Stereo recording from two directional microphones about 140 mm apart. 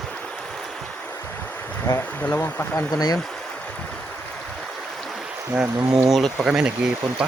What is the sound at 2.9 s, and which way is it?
Speech, 25° left (ahead or behind).